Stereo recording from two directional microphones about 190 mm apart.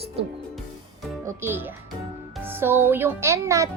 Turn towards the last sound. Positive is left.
turn(degrees=-15)  # may be behind; listen again after turning